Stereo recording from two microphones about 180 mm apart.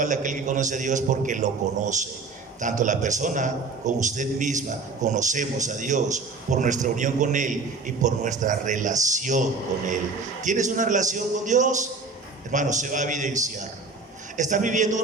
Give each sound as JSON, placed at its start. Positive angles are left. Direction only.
{"t": 0.0, "sound": "a man's voice", "side_deg": -45}